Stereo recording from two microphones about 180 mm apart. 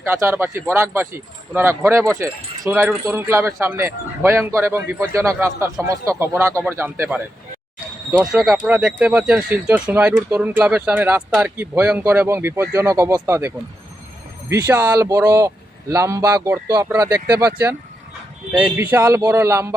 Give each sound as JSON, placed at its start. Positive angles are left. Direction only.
{"t": 0.0, "sound": "speech", "side_deg": -15}
{"t": 14.5, "sound": "speech", "side_deg": -15}
{"t": 18.5, "sound": "speech", "side_deg": -10}